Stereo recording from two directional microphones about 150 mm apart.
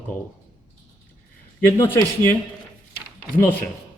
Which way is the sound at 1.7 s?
15° left (ahead or behind).